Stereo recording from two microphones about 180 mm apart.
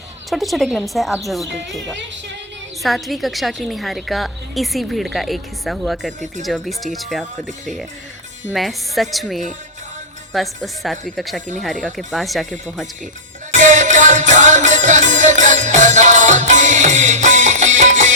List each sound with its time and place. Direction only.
0.3 s a woman's voice: centre (ahead or behind)
2.8 s a woman's voice: centre (ahead or behind)
8.5 s a woman's voice: centre (ahead or behind)
13.6 s music: 45° right (ahead or behind)